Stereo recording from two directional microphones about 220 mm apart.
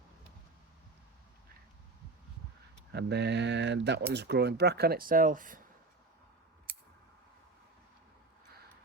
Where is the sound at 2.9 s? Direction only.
50° right (ahead or behind).